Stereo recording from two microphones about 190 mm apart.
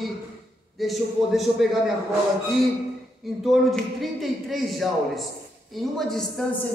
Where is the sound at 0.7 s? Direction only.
Centre (ahead or behind).